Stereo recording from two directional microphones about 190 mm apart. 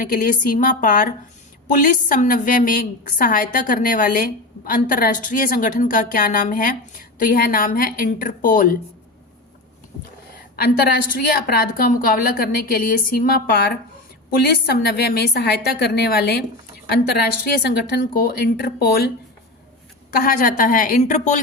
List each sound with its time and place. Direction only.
0.0 s a woman's voice: 45° left (ahead or behind)
10.6 s a woman's voice: 55° left (ahead or behind); by 21.4 s 40° left (ahead or behind)